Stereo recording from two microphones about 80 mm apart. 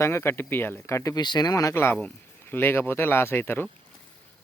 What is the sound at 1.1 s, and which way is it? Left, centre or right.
Speech, left.